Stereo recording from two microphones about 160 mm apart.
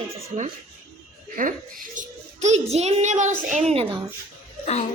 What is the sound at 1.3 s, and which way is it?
A child's voice, 55° right (ahead or behind).